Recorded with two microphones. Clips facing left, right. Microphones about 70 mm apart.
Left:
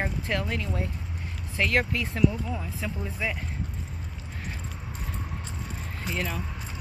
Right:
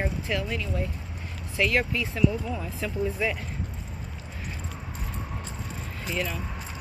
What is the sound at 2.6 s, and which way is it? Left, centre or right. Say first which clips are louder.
Speech: right 5 dB; centre.